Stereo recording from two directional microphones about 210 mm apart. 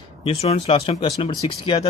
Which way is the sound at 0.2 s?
25° left (ahead or behind).